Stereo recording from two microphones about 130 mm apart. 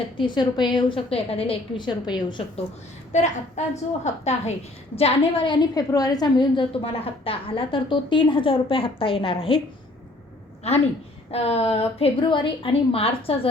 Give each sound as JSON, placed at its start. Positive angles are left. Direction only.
{"t": 0.2, "sound": "a woman's voice", "side_deg": 35}
{"t": 3.1, "sound": "a woman's voice", "side_deg": 65}
{"t": 4.9, "sound": "a woman's voice", "side_deg": 45}
{"t": 10.6, "sound": "a woman's voice", "side_deg": 55}